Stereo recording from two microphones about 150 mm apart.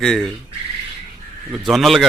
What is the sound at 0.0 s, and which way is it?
Speech, centre (ahead or behind).